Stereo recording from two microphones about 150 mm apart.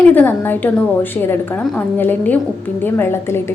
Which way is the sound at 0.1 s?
10° left (ahead or behind).